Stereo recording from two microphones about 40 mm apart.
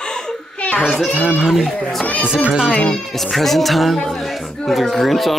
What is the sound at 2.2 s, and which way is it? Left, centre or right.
Speech, right.